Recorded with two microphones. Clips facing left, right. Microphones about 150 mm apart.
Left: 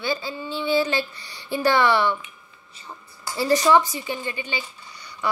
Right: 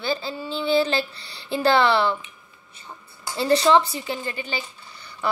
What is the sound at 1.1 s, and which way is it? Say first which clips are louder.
Speech: right 1 dB; 30° right (ahead or behind).